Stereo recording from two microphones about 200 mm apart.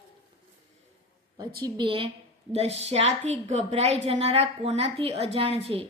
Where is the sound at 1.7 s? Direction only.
25° right (ahead or behind).